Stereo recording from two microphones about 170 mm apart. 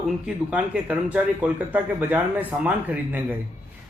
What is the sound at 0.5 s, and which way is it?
A man's voice, 5° right (ahead or behind).